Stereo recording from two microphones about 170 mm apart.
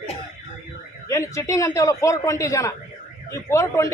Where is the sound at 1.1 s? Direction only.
20° left (ahead or behind).